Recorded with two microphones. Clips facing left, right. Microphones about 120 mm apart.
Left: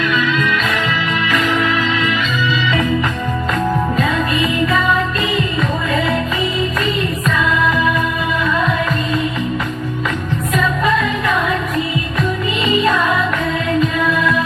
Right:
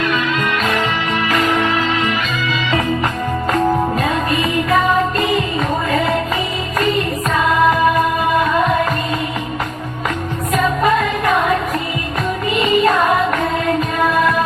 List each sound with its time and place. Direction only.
0.3 s music: 45° right (ahead or behind)
3.9 s music: 40° right (ahead or behind)
10.5 s music: 40° right (ahead or behind)
12.5 s music: 45° right (ahead or behind)